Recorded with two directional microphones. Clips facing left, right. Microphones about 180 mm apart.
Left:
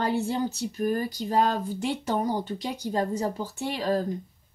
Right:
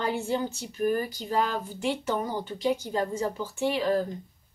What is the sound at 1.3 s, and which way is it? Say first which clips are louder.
Speech: left 4 dB; 40° left (ahead or behind).